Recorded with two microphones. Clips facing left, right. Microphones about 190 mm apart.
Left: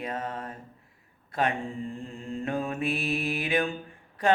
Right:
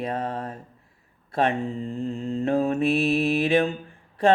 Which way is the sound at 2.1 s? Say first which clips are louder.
Right 8 dB; 25° right (ahead or behind).